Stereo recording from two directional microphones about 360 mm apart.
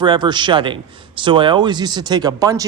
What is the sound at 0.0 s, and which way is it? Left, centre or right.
A man's voice, centre.